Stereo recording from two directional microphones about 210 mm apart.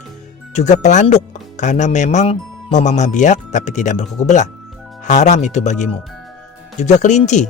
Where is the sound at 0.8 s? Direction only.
35° left (ahead or behind).